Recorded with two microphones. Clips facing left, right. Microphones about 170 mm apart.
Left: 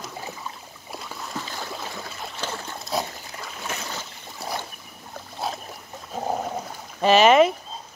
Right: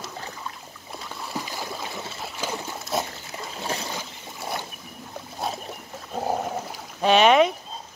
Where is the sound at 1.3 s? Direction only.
10° right (ahead or behind).